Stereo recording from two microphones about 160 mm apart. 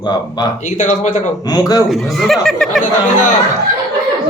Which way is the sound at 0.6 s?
50° left (ahead or behind).